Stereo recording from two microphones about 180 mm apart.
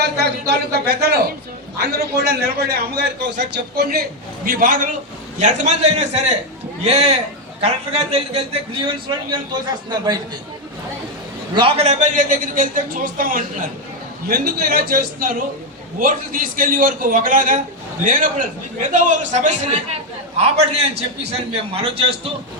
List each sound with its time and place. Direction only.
0.0 s a man's voice: 65° right (ahead or behind); by 8.4 s 35° right (ahead or behind)
11.5 s a man's voice: 25° right (ahead or behind)
11.9 s a man's voice: 45° right (ahead or behind)